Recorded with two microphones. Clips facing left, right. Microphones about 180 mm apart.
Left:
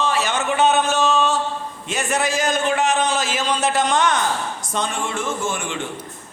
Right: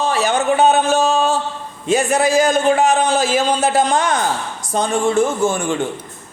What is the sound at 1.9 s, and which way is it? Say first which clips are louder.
A man's voice: right 8 dB; 35° right (ahead or behind).